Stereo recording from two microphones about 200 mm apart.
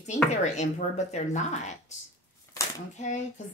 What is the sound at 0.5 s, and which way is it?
A woman's voice, 35° left (ahead or behind).